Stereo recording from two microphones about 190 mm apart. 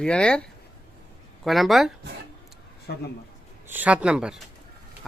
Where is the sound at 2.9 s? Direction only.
60° left (ahead or behind).